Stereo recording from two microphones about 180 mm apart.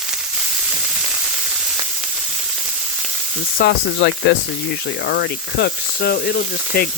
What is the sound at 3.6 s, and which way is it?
Speech, 65° left (ahead or behind).